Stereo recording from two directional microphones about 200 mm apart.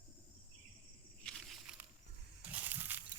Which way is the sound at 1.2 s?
Centre (ahead or behind).